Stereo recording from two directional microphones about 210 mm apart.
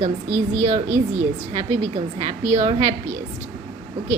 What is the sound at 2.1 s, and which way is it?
Speech, 35° right (ahead or behind).